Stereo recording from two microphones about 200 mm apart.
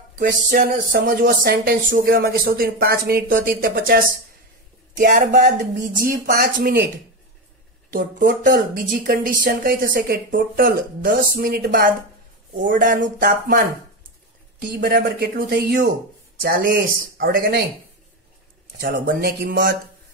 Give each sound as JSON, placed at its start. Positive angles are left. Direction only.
{"t": 0.2, "sound": "speech", "side_deg": -45}
{"t": 7.9, "sound": "speech", "side_deg": -45}
{"t": 18.8, "sound": "speech", "side_deg": -45}